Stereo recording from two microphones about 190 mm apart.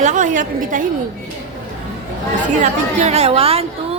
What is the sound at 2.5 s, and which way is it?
A woman's voice, 40° right (ahead or behind).